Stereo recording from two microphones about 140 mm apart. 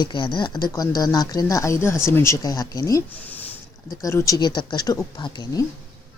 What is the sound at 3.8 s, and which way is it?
Speech, 25° left (ahead or behind).